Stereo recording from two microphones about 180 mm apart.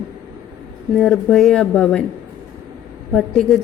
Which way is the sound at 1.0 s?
5° left (ahead or behind).